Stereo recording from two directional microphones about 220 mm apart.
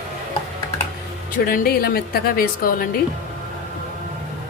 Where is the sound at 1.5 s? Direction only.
45° left (ahead or behind).